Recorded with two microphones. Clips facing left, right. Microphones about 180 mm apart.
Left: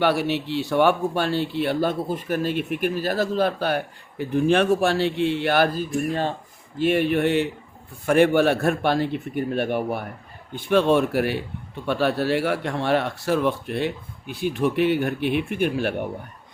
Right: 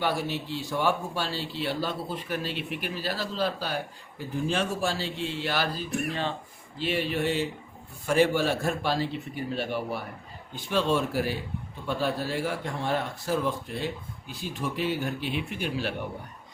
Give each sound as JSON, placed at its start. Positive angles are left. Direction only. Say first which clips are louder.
{"t": 0.0, "sound": "speech", "louder": "left 7 dB", "side_deg": 70}